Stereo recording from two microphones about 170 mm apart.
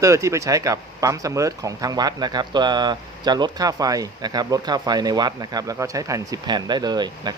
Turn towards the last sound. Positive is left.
turn(degrees=-25)  # may be behind; listen again after turning